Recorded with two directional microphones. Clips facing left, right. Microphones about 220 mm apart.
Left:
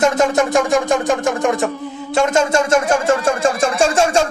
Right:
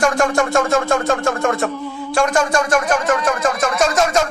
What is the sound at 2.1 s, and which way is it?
Speech, 25° left (ahead or behind).